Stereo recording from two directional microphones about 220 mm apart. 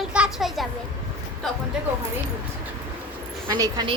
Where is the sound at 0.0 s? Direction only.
5° right (ahead or behind).